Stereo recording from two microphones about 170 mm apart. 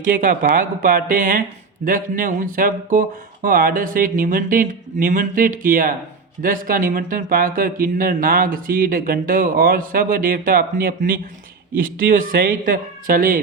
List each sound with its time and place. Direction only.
0.0 s speech: 50° right (ahead or behind)